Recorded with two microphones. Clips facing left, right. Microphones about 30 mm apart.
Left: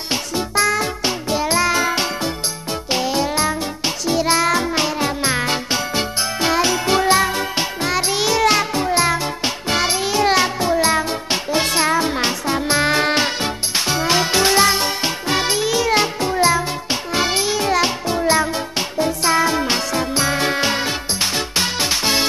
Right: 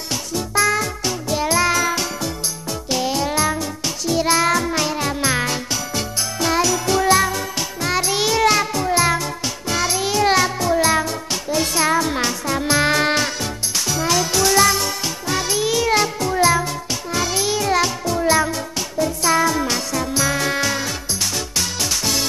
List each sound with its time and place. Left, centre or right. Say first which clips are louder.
0.1 s music: left 2 dB; left